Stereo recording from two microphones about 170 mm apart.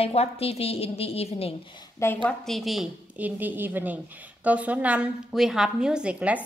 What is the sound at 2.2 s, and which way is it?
A woman's voice, centre (ahead or behind).